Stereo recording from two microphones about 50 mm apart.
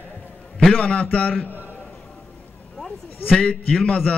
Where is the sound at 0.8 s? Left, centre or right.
Left.